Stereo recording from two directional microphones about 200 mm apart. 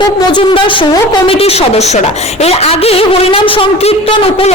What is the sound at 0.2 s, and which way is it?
A woman's voice, 20° left (ahead or behind).